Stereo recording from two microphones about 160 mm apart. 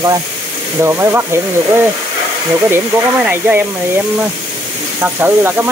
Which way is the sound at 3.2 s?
10° right (ahead or behind).